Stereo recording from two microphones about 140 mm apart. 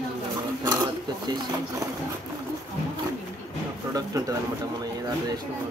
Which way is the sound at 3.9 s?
25° right (ahead or behind).